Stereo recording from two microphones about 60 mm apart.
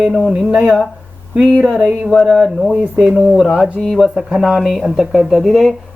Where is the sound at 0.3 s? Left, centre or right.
Centre.